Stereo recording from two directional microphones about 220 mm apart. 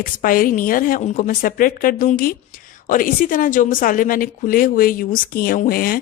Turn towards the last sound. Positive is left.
turn(degrees=40)  # may be behind; listen again after turning